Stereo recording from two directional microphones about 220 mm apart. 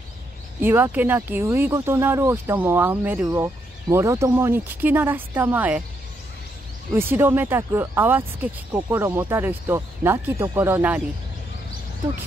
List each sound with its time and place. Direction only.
0.6 s speech: 10° right (ahead or behind)
6.9 s speech: 10° right (ahead or behind)